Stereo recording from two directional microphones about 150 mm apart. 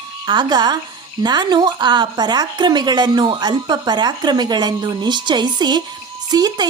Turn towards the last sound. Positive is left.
turn(degrees=-25)  # may be behind; listen again after turning